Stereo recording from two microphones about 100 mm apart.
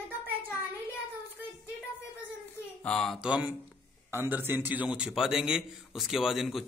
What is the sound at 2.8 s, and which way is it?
Speech, 10° left (ahead or behind).